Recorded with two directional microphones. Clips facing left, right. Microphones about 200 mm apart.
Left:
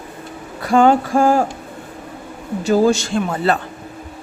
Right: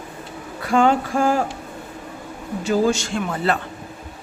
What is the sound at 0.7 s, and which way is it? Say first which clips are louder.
Speech: left 4 dB; 40° left (ahead or behind).